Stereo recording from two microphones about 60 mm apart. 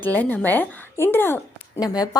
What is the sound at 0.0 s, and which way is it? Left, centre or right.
Speech, left.